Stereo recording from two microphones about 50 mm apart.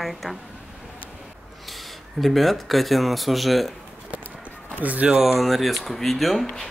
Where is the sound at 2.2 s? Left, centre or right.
Centre.